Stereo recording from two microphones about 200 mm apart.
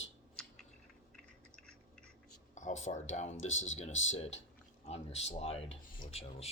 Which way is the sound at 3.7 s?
35° left (ahead or behind).